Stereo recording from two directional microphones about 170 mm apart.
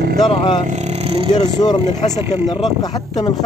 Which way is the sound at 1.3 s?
25° left (ahead or behind).